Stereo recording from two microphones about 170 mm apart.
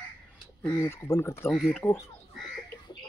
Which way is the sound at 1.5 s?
Centre (ahead or behind).